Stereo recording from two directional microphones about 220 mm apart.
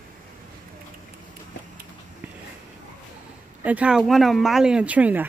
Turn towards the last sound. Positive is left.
turn(degrees=-5)  # may be behind; listen again after turning